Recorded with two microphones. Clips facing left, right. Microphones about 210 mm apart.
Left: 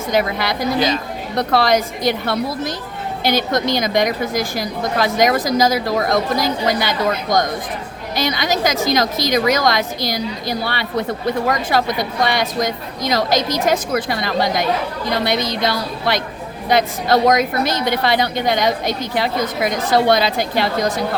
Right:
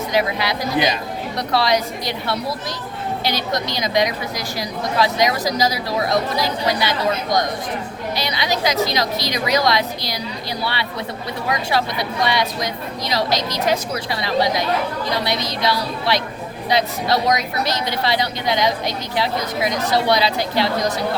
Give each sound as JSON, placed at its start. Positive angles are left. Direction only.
{"t": 0.1, "sound": "a woman's voice", "side_deg": 50}
{"t": 8.1, "sound": "a woman's voice", "side_deg": 50}